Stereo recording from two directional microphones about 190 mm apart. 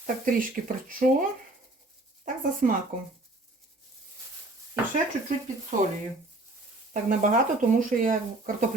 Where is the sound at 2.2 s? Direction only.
45° right (ahead or behind).